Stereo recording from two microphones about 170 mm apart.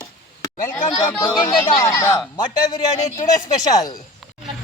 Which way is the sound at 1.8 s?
15° left (ahead or behind).